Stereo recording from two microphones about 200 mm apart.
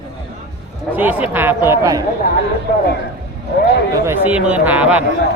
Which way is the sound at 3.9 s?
15° right (ahead or behind).